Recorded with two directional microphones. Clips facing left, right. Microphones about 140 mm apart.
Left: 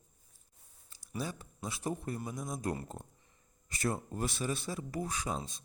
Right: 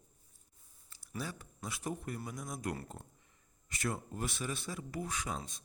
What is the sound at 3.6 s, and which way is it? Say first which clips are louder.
Speech: left 3 dB; 35° left (ahead or behind).